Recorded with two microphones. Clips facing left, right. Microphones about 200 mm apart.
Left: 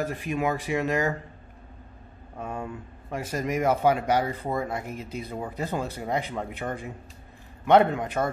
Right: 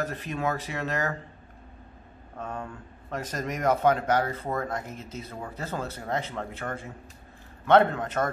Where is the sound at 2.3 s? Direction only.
10° left (ahead or behind).